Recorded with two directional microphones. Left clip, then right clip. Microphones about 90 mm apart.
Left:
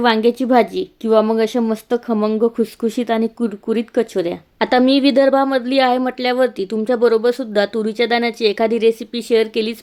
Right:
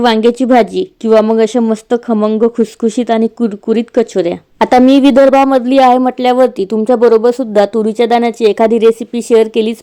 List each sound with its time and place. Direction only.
0.0 s speech: 30° right (ahead or behind)